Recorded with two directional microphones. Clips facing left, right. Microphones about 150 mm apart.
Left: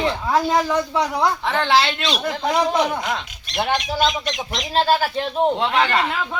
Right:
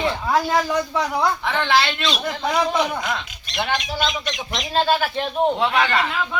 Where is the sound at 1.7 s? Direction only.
30° left (ahead or behind).